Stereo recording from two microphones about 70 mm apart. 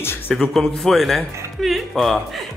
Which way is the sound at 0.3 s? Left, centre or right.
Centre.